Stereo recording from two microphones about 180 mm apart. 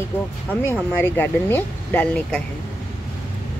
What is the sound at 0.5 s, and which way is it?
Speech, 10° left (ahead or behind).